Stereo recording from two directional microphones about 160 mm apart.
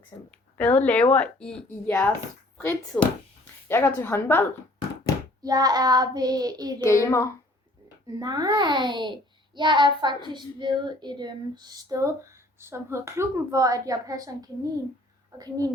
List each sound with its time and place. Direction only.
0.3 s speech: 10° left (ahead or behind)
5.4 s a child's voice: 25° right (ahead or behind)
6.8 s speech: 20° left (ahead or behind)
8.0 s a child's voice: 25° right (ahead or behind)